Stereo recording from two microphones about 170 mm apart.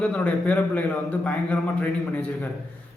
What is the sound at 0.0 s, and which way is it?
A man's voice, 5° left (ahead or behind).